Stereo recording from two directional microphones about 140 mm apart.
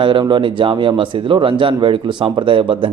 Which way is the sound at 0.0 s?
35° right (ahead or behind).